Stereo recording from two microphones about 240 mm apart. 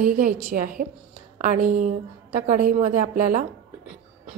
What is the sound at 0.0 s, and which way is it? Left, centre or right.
A woman's voice, right.